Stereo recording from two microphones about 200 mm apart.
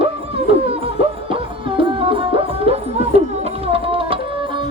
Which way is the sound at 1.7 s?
25° right (ahead or behind).